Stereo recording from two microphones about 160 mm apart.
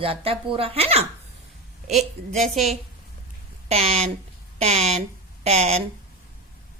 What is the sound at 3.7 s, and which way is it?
A woman's voice, 40° right (ahead or behind).